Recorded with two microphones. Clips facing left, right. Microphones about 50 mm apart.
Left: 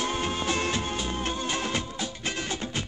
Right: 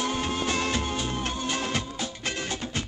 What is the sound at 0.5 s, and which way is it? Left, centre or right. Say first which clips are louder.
Music: right 1 dB; left.